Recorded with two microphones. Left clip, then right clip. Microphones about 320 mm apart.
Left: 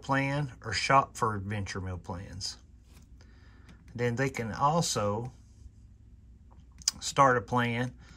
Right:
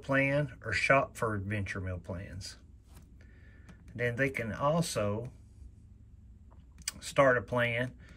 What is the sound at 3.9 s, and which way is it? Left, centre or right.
Speech, centre.